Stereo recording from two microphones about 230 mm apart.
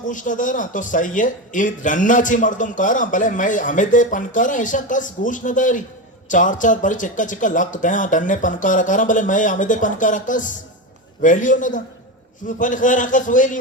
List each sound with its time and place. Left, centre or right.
0.1 s speech: left